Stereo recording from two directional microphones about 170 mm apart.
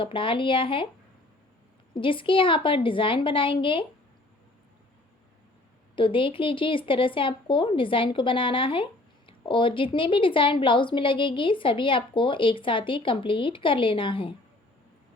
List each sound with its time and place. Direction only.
0.0 s speech: 30° left (ahead or behind)
2.0 s speech: 30° left (ahead or behind)
6.0 s speech: 30° left (ahead or behind)